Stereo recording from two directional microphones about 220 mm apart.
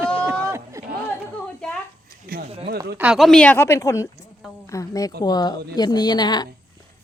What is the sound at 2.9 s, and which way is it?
A woman's voice, 5° right (ahead or behind).